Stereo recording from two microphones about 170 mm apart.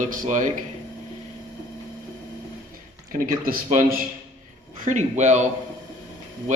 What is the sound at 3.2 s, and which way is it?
Speech, 55° right (ahead or behind).